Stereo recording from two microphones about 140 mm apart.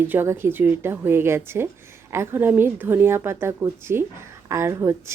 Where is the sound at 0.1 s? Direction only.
15° right (ahead or behind).